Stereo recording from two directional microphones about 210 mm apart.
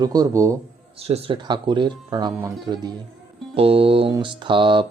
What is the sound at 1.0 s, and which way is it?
Mantra, 25° right (ahead or behind).